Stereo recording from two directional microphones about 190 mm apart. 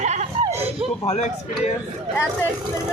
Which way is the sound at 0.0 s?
40° right (ahead or behind).